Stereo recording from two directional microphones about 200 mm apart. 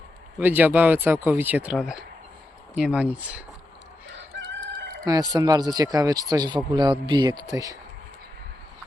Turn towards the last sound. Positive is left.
turn(degrees=-15)  # may be behind; listen again after turning